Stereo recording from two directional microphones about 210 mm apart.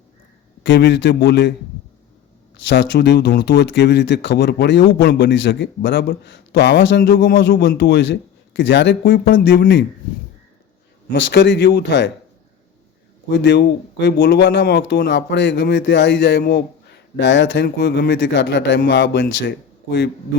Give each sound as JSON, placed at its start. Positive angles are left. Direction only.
{"t": 0.6, "sound": "speech", "side_deg": 55}
{"t": 2.6, "sound": "speech", "side_deg": 55}
{"t": 11.1, "sound": "speech", "side_deg": 55}
{"t": 13.3, "sound": "speech", "side_deg": 55}
{"t": 16.4, "sound": "speech", "side_deg": 45}